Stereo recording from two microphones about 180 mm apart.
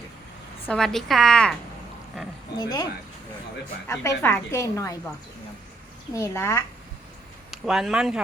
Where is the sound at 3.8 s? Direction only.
15° left (ahead or behind).